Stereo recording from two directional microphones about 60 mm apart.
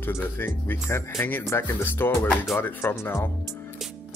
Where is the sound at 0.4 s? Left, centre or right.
Left.